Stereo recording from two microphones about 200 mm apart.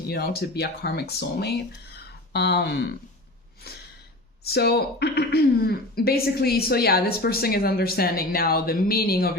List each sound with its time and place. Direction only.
0.1 s speech: 50° left (ahead or behind)